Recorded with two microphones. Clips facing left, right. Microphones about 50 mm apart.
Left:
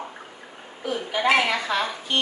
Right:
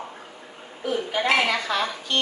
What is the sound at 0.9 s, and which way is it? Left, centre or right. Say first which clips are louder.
A woman's voice: left 1 dB; centre.